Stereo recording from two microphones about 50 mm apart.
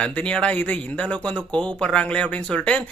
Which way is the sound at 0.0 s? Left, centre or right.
Left.